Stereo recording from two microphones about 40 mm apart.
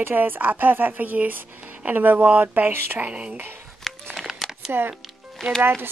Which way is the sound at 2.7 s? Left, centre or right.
Right.